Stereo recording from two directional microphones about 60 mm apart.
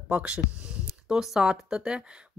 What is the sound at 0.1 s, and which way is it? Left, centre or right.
Speech, centre.